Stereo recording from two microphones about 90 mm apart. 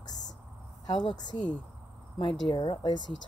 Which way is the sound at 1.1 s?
55° left (ahead or behind).